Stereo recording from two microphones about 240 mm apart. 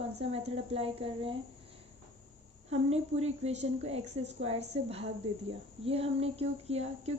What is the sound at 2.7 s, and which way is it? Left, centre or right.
Speech, right.